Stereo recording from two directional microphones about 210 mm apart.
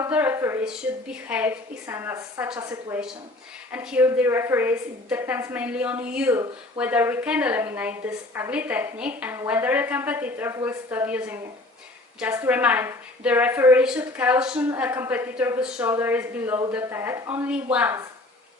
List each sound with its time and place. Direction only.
0.0 s a woman's voice: 10° right (ahead or behind)